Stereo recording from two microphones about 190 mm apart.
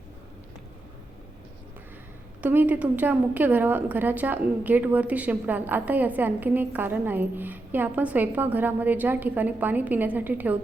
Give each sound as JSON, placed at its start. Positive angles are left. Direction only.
{"t": 2.4, "sound": "a woman's voice", "side_deg": -10}